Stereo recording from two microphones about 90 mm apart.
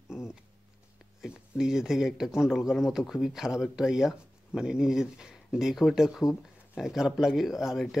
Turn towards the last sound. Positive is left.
turn(degrees=-5)  # may be behind; listen again after turning